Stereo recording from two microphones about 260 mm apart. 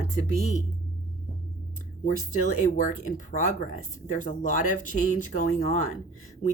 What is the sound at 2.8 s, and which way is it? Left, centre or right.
Speech, left.